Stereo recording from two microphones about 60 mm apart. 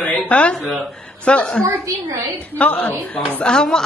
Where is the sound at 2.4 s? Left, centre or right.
Left.